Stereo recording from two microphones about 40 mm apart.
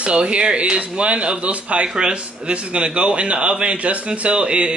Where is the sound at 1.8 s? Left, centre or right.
Right.